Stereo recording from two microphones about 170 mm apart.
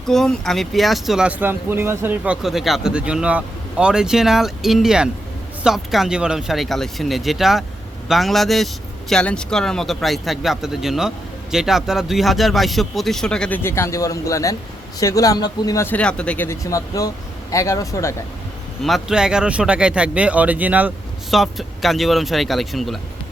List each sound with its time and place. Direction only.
0.0 s speech: centre (ahead or behind); by 18.1 s 20° left (ahead or behind)
18.8 s speech: centre (ahead or behind)